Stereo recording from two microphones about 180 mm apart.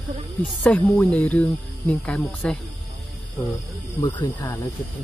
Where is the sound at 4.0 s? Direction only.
25° left (ahead or behind).